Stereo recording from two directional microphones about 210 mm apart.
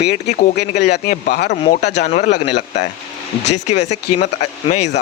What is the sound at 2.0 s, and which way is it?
Speech, 35° left (ahead or behind).